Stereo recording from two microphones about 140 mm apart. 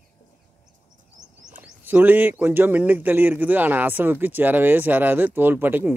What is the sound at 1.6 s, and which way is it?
Speech, 10° right (ahead or behind).